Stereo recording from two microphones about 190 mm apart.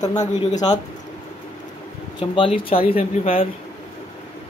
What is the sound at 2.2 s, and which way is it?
Speech, 30° left (ahead or behind).